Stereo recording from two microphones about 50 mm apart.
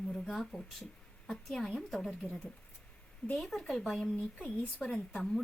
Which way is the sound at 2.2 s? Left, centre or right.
Left.